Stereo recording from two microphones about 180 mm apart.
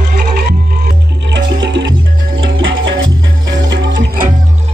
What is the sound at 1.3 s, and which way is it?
Music, 85° right.